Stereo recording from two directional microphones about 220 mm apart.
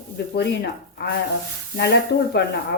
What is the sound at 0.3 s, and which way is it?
A woman's voice, 50° left (ahead or behind).